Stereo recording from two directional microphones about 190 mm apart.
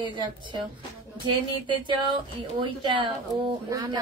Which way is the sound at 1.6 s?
25° right (ahead or behind).